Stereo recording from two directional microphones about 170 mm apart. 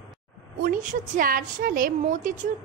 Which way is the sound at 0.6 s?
55° right (ahead or behind).